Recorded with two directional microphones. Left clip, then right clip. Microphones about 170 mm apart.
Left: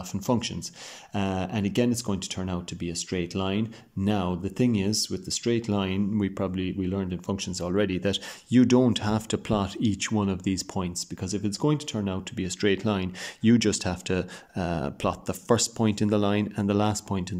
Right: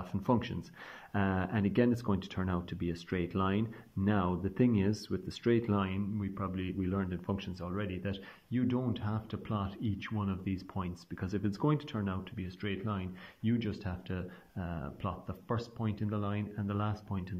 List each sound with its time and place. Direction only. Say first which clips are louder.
0.1 s speech: left 5 dB; 15° left (ahead or behind)
6.1 s speech: left 11 dB; 40° left (ahead or behind)
6.5 s speech: left 7 dB; 20° left (ahead or behind)
7.6 s speech: left 15 dB; 35° left (ahead or behind)